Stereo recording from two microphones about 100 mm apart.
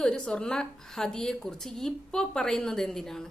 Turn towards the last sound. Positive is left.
turn(degrees=5)  # may be behind; listen again after turning